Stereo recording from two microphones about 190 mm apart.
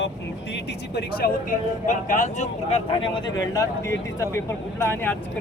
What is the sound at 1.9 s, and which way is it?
Speech, 40° left (ahead or behind).